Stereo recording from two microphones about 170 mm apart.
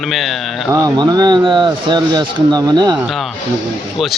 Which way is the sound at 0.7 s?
25° right (ahead or behind).